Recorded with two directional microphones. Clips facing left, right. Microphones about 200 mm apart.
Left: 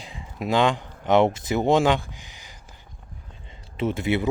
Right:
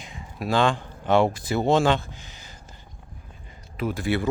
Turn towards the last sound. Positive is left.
turn(degrees=20)  # may be behind; listen again after turning